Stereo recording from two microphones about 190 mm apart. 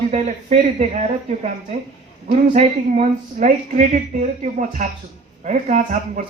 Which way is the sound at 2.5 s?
35° right (ahead or behind).